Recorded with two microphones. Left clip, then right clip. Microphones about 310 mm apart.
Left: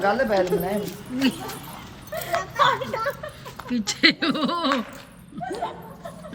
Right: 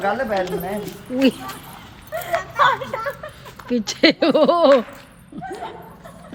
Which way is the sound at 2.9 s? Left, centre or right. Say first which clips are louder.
Right 1 dB; centre.